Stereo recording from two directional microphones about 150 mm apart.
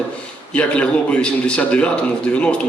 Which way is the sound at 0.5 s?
10° left (ahead or behind).